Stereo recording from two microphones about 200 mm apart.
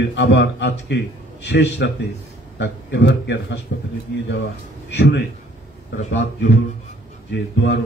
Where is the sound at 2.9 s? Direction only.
60° left (ahead or behind).